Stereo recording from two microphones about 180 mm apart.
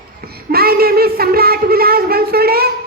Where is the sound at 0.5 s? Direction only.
60° right (ahead or behind).